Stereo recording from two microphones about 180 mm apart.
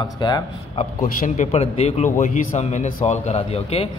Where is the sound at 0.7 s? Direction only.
40° left (ahead or behind).